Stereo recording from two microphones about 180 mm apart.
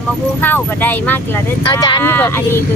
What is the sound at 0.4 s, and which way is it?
Speech, 10° left (ahead or behind).